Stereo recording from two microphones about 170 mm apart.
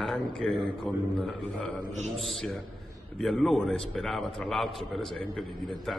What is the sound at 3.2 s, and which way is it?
A man's voice, centre (ahead or behind).